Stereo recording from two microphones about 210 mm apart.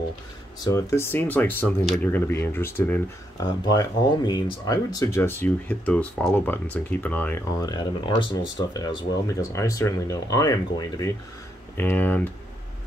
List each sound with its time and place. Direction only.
0.7 s speech: 15° left (ahead or behind)